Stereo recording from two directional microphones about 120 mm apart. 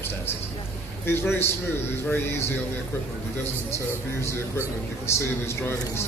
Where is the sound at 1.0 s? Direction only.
20° left (ahead or behind).